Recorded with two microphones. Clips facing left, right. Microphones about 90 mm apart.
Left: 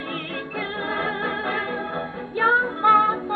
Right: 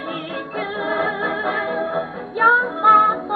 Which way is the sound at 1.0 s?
20° right (ahead or behind).